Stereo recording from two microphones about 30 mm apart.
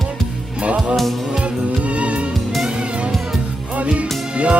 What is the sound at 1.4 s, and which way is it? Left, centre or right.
Music, right.